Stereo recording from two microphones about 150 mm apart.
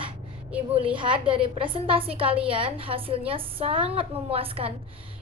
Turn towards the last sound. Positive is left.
turn(degrees=-35)  # may be behind; listen again after turning